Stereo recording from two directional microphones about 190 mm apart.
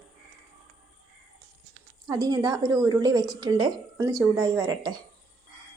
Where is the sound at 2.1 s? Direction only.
20° right (ahead or behind).